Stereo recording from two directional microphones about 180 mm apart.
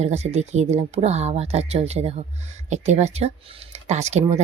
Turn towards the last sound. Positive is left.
turn(degrees=-40)  # may be behind; listen again after turning